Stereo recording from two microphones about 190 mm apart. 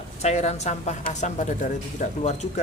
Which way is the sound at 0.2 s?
35° left (ahead or behind).